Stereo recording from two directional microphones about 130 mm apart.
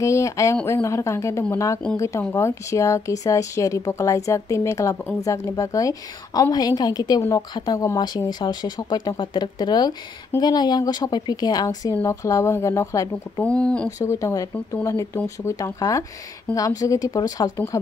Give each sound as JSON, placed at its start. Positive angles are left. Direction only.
{"t": 0.0, "sound": "speech", "side_deg": 25}
{"t": 13.4, "sound": "speech", "side_deg": 10}
{"t": 13.8, "sound": "speech", "side_deg": 25}